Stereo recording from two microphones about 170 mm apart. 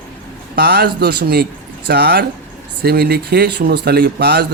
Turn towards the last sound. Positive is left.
turn(degrees=-70)  # may be behind; listen again after turning